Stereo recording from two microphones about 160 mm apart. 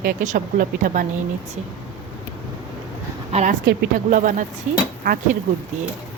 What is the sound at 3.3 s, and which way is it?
Speech, 40° right (ahead or behind).